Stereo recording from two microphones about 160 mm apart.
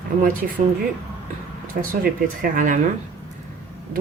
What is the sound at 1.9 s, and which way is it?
Speech, 60° right (ahead or behind).